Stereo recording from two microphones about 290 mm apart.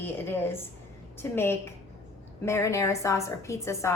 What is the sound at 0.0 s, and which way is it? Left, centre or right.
A woman's voice, centre.